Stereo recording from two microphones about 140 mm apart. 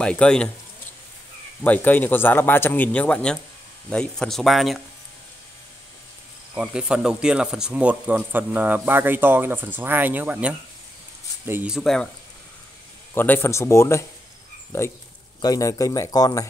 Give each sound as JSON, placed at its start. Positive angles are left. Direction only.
{"t": 0.0, "sound": "a man's voice", "side_deg": 5}
{"t": 1.6, "sound": "a man's voice", "side_deg": 15}
{"t": 6.5, "sound": "speech", "side_deg": -5}
{"t": 11.7, "sound": "speech", "side_deg": 0}
{"t": 13.1, "sound": "speech", "side_deg": 15}
{"t": 15.4, "sound": "speech", "side_deg": 25}